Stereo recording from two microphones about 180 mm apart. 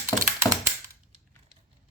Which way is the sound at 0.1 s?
15° left (ahead or behind).